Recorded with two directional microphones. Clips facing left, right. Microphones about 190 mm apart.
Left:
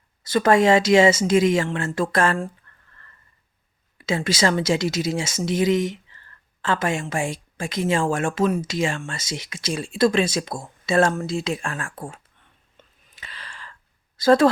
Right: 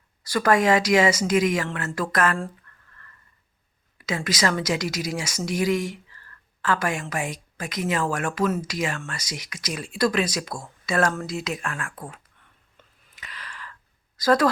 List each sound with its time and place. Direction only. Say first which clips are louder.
0.2 s speech: left 3 dB; 25° left (ahead or behind)
2.7 s a sound: even; 30° left (ahead or behind)
3.9 s speech: left 4 dB; 25° left (ahead or behind)
12.7 s whispering: left 3 dB; 30° left (ahead or behind)
14.2 s speech: left 4 dB; 25° left (ahead or behind)